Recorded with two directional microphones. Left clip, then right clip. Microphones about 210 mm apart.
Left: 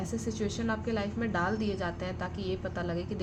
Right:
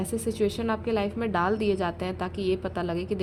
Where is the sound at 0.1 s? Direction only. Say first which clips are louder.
Right 10 dB; 45° right (ahead or behind).